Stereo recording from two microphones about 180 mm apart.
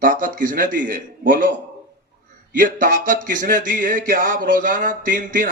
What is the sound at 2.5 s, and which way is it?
A man's voice, 50° right (ahead or behind).